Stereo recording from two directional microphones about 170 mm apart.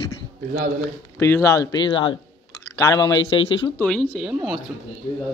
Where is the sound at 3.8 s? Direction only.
5° left (ahead or behind).